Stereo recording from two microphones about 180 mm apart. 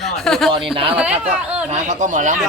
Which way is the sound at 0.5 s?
30° right (ahead or behind).